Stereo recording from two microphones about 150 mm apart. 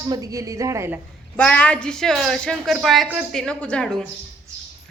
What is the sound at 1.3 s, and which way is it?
A woman's voice, 10° left (ahead or behind).